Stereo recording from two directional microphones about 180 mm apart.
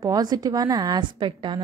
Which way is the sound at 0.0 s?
20° right (ahead or behind).